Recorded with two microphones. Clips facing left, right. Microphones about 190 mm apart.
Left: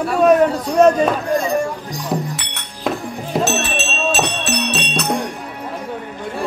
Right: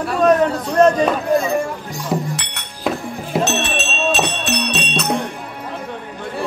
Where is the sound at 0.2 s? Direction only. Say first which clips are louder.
Left 2 dB; 10° left (ahead or behind).